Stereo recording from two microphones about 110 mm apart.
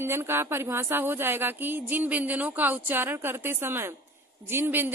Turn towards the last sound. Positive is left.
turn(degrees=-20)  # may be behind; listen again after turning